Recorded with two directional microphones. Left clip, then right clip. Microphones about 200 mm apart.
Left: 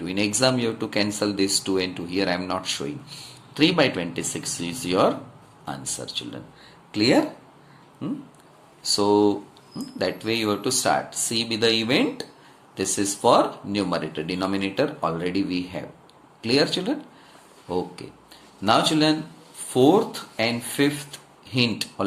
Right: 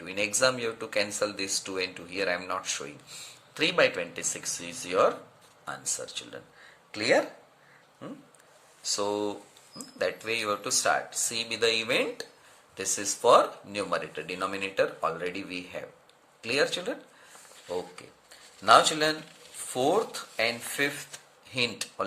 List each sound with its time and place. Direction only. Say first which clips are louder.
0.0 s speech: left 4 dB; 15° right (ahead or behind)
6.9 s speech: left 5 dB; 15° right (ahead or behind)
18.6 s speech: left 1 dB; 25° right (ahead or behind)